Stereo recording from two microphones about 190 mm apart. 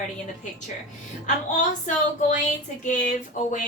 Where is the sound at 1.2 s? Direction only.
40° left (ahead or behind).